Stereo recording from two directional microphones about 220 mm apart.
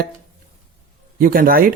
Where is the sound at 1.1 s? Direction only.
40° right (ahead or behind).